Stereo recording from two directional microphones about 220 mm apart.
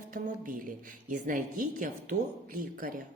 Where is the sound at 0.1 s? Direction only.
40° right (ahead or behind).